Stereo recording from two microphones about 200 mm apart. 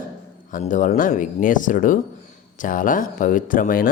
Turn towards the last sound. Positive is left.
turn(degrees=45)  # may be behind; listen again after turning